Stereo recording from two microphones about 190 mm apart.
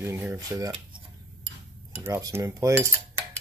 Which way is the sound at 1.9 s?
15° right (ahead or behind).